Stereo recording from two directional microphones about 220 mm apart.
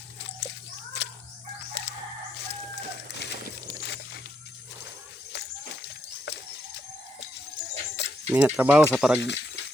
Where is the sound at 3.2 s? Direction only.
50° left (ahead or behind).